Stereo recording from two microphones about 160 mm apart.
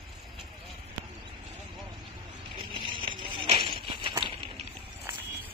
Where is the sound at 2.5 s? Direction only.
35° right (ahead or behind).